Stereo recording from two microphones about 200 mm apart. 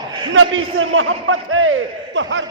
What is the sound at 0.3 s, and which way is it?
A man's voice, 80° right.